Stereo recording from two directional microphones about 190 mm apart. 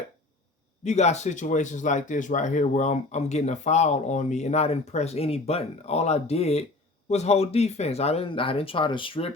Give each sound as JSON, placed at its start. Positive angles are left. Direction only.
{"t": 0.9, "sound": "speech", "side_deg": 35}